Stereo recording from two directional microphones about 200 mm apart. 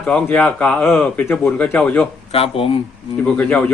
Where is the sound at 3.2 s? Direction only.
5° left (ahead or behind).